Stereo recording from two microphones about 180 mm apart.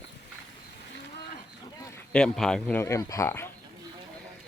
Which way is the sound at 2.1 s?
5° left (ahead or behind).